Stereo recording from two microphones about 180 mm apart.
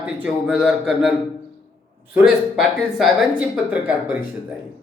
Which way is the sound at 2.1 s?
Centre (ahead or behind).